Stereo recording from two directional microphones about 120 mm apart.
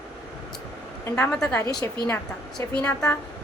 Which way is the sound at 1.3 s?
10° left (ahead or behind).